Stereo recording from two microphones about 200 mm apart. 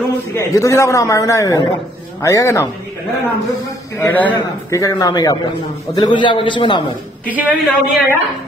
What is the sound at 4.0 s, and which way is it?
A man's voice, 10° left (ahead or behind).